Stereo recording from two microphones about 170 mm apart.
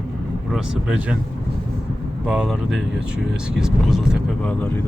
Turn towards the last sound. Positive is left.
turn(degrees=5)  # may be behind; listen again after turning